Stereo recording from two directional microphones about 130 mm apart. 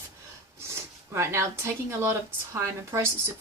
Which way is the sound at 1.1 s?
20° right (ahead or behind).